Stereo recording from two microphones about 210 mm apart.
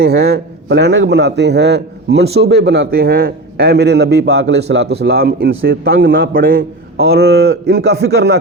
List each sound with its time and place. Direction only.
0.0 s a man's voice: 50° right (ahead or behind)